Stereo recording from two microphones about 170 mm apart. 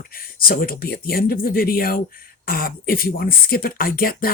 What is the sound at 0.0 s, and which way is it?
Speech, 60° left (ahead or behind).